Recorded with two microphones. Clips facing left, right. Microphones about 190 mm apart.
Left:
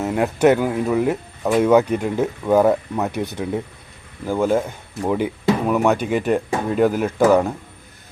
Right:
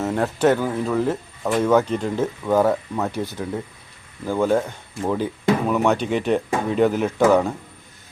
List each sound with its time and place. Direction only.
0.0 s speech: 10° left (ahead or behind)
4.3 s speech: 10° left (ahead or behind)